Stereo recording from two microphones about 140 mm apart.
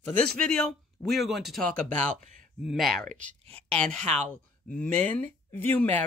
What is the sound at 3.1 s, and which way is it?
Speech, 65° right (ahead or behind).